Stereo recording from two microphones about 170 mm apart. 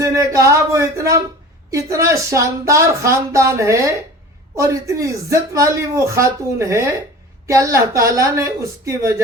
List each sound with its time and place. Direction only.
0.0 s speech: 20° right (ahead or behind)